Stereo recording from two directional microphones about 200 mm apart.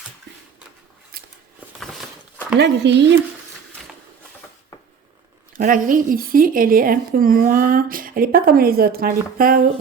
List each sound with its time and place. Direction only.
1.1 s a sound: 50° right (ahead or behind)
2.6 s speech: 55° right (ahead or behind)
5.5 s speech: 45° right (ahead or behind)